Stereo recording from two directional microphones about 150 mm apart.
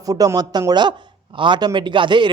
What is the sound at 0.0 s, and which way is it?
A man's voice, 25° right (ahead or behind).